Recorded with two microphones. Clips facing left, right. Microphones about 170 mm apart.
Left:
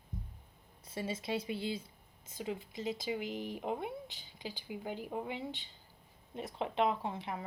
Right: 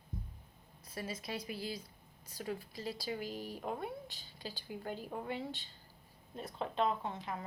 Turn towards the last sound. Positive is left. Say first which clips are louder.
# left 2 dB
turn(degrees=25)  # may be behind; listen again after turning